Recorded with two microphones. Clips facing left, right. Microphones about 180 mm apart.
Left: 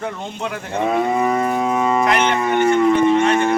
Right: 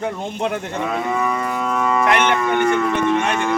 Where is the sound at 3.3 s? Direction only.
45° left (ahead or behind).